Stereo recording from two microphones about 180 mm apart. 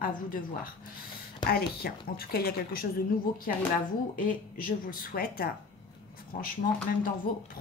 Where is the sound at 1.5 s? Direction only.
60° left (ahead or behind).